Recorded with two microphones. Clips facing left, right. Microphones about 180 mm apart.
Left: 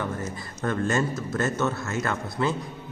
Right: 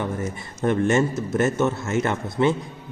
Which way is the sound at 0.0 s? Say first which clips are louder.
Right 3 dB; 20° right (ahead or behind).